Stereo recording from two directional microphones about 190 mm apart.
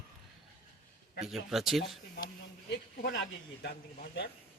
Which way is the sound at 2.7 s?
65° left (ahead or behind).